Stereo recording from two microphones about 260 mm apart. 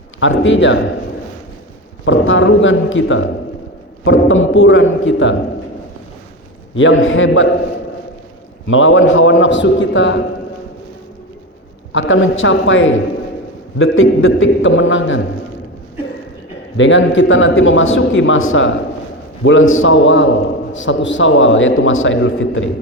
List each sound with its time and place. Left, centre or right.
0.2 s a man's voice: left
2.0 s a man's voice: left
6.7 s a man's voice: left
8.6 s a man's voice: left
11.9 s a man's voice: left
16.7 s a man's voice: left